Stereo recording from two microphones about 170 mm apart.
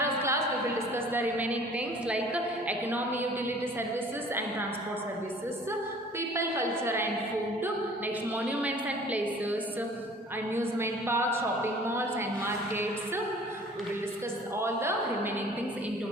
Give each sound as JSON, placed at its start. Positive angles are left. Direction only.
{"t": 0.0, "sound": "a sound", "side_deg": -15}
{"t": 0.9, "sound": "a woman's voice", "side_deg": -10}
{"t": 6.3, "sound": "a woman's voice", "side_deg": -15}
{"t": 14.6, "sound": "a woman's voice", "side_deg": -15}